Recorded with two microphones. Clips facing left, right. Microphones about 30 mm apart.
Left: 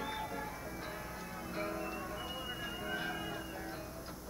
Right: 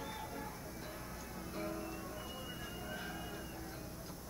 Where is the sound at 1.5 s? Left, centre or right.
Left.